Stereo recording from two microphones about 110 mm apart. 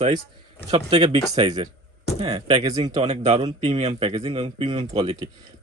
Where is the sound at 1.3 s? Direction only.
40° right (ahead or behind).